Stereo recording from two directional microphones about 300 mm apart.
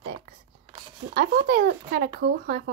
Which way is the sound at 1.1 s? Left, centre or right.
Right.